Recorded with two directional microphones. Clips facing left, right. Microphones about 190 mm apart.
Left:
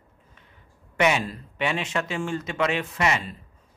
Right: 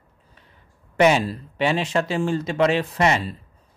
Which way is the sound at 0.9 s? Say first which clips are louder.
Right 5 dB; 35° right (ahead or behind).